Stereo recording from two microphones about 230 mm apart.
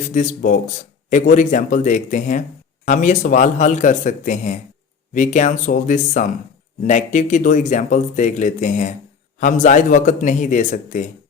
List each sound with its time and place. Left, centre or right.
0.1 s speech: left